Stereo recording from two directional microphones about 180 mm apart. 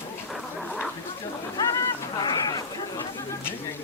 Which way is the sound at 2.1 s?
25° left (ahead or behind).